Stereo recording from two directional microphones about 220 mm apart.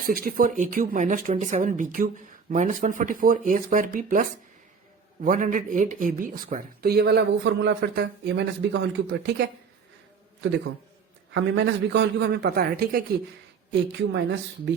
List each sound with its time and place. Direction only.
0.0 s speech: 40° right (ahead or behind)
11.3 s speech: 55° right (ahead or behind)
14.1 s a woman's voice: 55° right (ahead or behind)